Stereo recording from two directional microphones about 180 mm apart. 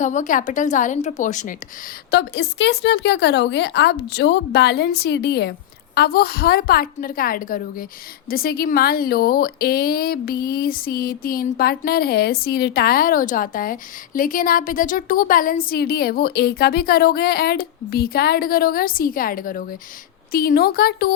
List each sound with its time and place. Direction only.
0.0 s a woman's voice: 45° left (ahead or behind)
2.0 s speech: 65° left (ahead or behind)